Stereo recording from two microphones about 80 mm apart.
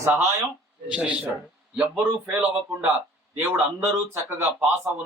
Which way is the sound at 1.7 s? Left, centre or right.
Centre.